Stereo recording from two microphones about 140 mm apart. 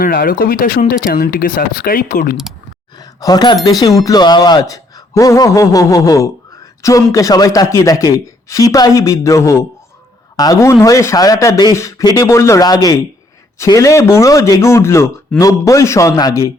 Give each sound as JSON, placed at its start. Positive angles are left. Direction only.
{"t": 0.0, "sound": "speech", "side_deg": 90}
{"t": 3.0, "sound": "speech", "side_deg": 30}